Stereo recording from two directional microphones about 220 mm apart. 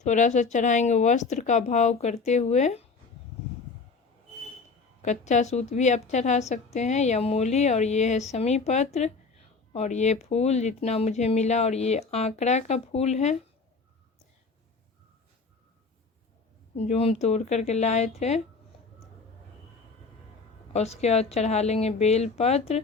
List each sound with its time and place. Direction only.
0.0 s speech: 35° left (ahead or behind)
5.0 s speech: 30° left (ahead or behind)
16.7 s a woman's voice: 30° left (ahead or behind)
20.7 s a woman's voice: 30° left (ahead or behind)